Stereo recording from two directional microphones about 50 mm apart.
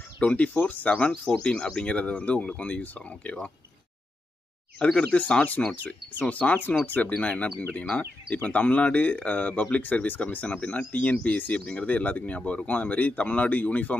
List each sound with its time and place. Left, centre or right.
0.2 s speech: left
4.7 s speech: centre
6.1 s speech: left